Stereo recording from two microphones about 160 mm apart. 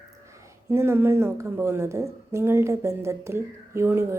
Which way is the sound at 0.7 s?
15° right (ahead or behind).